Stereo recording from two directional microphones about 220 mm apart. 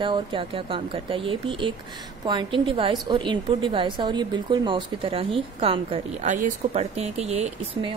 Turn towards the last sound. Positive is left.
turn(degrees=-30)  # may be behind; listen again after turning